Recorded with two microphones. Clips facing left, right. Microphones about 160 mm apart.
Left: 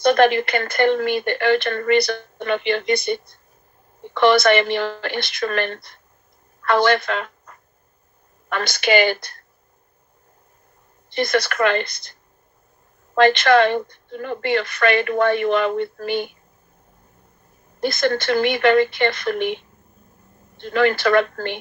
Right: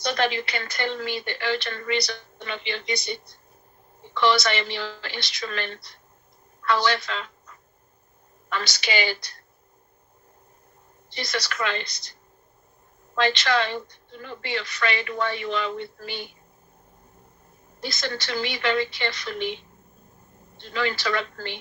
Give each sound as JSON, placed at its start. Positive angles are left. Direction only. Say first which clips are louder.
{"t": 0.0, "sound": "a woman's voice", "louder": "left 10 dB", "side_deg": 55}
{"t": 11.1, "sound": "speech", "louder": "left 11 dB", "side_deg": 55}
{"t": 13.1, "sound": "a woman's voice", "louder": "left 9 dB", "side_deg": 55}
{"t": 17.7, "sound": "a woman's voice", "louder": "left 11 dB", "side_deg": 55}